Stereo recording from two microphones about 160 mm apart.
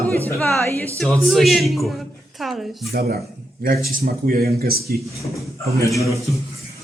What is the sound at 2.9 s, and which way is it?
Speech, 80° right.